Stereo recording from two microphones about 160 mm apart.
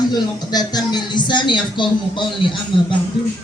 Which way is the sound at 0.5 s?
25° left (ahead or behind).